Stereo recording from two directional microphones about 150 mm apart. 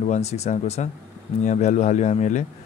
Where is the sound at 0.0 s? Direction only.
45° left (ahead or behind).